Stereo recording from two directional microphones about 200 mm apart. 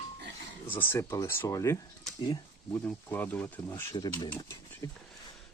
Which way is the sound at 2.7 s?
10° left (ahead or behind).